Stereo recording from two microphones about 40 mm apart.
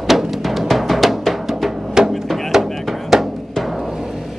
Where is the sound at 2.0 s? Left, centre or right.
Centre.